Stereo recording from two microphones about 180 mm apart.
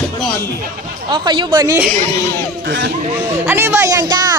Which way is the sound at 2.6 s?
70° right (ahead or behind).